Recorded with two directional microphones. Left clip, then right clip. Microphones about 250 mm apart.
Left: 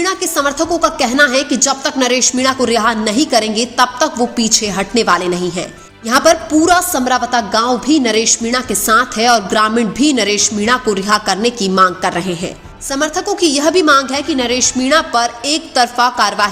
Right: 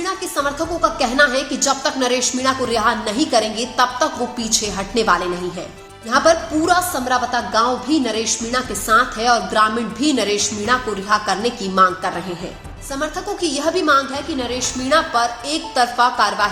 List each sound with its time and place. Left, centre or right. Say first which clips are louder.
0.0 s a woman's voice: left 6 dB; left